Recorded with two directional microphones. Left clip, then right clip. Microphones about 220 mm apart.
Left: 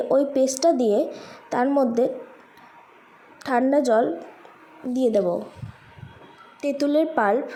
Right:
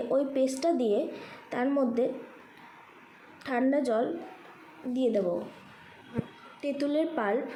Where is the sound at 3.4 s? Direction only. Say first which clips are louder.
Left 8 dB; 25° left (ahead or behind).